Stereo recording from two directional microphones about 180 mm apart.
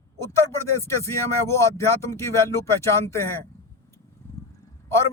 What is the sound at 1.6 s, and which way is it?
Speech, 15° left (ahead or behind).